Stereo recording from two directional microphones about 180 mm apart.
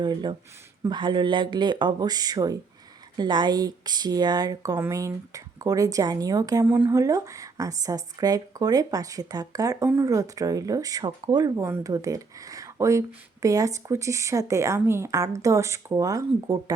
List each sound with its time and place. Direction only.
0.0 s speech: 25° right (ahead or behind)